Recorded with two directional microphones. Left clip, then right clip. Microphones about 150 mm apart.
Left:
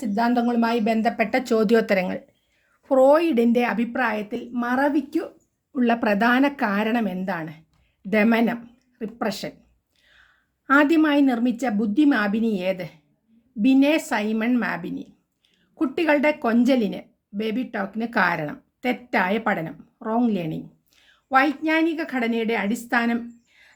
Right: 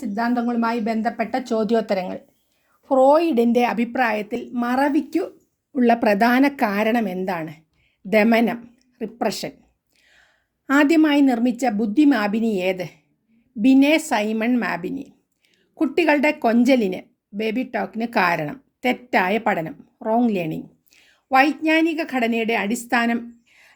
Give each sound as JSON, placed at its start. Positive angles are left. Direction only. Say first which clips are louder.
{"t": 0.0, "sound": "speech", "louder": "left 1 dB", "side_deg": 15}
{"t": 2.8, "sound": "a woman's voice", "louder": "right 1 dB", "side_deg": 0}
{"t": 5.7, "sound": "a woman's voice", "louder": "right 4 dB", "side_deg": -30}